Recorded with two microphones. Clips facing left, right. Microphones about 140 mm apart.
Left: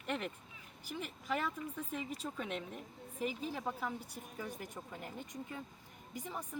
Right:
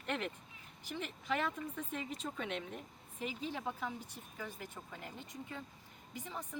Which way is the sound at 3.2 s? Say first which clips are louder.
Left 2 dB; 40° left (ahead or behind).